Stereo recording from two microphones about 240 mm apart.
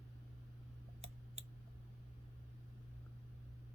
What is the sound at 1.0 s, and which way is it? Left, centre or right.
Clicking, right.